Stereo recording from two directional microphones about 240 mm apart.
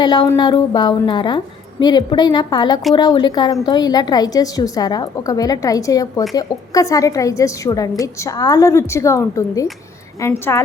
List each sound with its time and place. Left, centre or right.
0.0 s a woman's voice: centre